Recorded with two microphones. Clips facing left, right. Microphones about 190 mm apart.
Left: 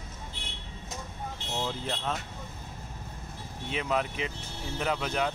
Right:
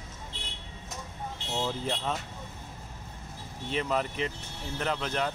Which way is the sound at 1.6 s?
Centre (ahead or behind).